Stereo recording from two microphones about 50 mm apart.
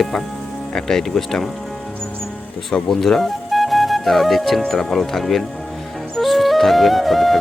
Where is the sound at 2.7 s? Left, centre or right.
Centre.